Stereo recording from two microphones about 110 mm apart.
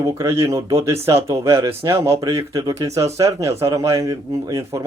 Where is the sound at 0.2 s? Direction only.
30° right (ahead or behind).